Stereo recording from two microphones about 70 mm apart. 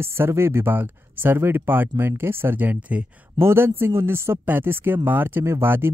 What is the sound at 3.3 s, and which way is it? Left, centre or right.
Speech, right.